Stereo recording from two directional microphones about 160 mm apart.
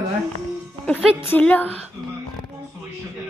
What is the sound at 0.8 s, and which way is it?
Speech, 10° left (ahead or behind).